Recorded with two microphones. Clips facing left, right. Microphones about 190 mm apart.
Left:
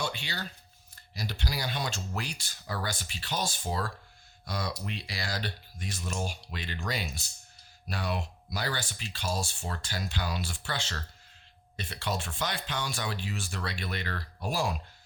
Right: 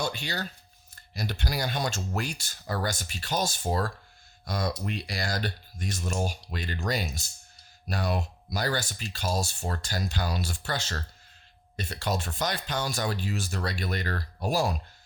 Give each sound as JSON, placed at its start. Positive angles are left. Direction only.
{"t": 0.0, "sound": "speech", "side_deg": -45}